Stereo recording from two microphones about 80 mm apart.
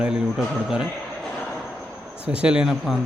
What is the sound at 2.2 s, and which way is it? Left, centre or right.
Speech, centre.